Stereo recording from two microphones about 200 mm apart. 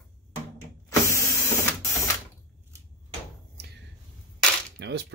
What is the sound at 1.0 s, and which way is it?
Power windows, 15° left (ahead or behind).